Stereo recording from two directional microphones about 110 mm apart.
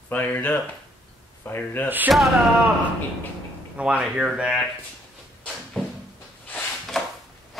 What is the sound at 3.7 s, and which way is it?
Speech, 10° right (ahead or behind).